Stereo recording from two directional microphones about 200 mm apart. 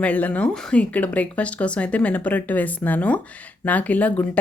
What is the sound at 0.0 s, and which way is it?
Speech, 5° left (ahead or behind).